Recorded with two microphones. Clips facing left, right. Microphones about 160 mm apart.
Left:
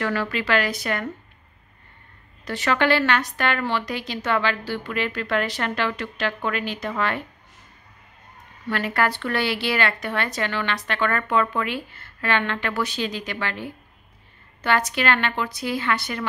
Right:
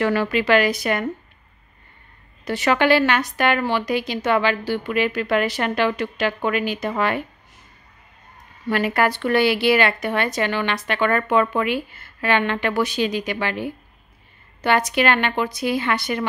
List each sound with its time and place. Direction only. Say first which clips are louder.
0.0 s speech: right 5 dB; 15° right (ahead or behind)
2.4 s speech: right 3 dB; 10° right (ahead or behind)
8.6 s speech: right 4 dB; 15° right (ahead or behind)